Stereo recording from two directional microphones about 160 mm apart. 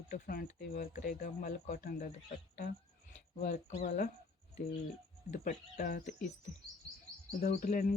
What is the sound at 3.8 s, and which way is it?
Speech, 60° left (ahead or behind).